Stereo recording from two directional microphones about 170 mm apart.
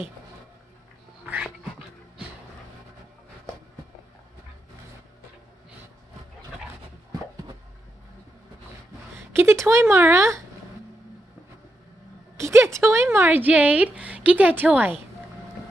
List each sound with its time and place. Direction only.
1.2 s dog: 10° right (ahead or behind)
9.3 s speech: 15° right (ahead or behind)
12.4 s a woman's voice: 15° right (ahead or behind)